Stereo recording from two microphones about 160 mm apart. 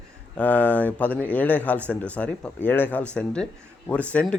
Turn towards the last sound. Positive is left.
turn(degrees=5)  # may be behind; listen again after turning